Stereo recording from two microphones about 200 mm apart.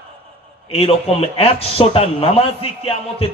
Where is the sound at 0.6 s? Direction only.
30° left (ahead or behind).